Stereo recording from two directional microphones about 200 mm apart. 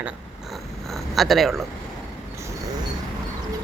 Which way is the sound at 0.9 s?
Centre (ahead or behind).